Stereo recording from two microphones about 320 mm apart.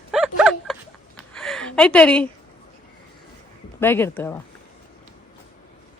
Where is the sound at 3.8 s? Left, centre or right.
Centre.